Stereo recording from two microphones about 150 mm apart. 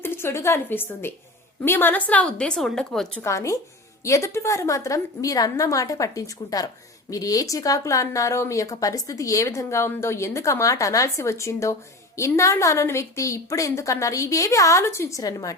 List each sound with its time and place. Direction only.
0.0 s a woman's voice: 15° left (ahead or behind)
3.2 s speech: 20° left (ahead or behind)